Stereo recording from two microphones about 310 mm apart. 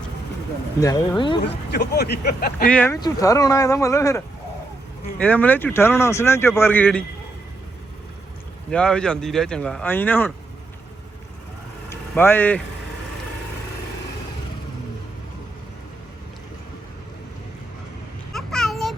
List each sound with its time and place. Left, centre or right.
0.8 s speech: centre
1.4 s speech: left
2.6 s speech: centre
5.2 s speech: centre
8.7 s speech: centre
11.9 s a sound: centre
18.3 s a sound: centre